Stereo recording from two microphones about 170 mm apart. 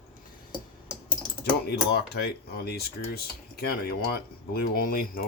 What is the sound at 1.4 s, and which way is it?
Speech, 70° left (ahead or behind).